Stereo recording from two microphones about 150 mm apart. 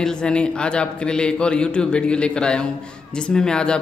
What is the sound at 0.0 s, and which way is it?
A man's voice, 5° left (ahead or behind).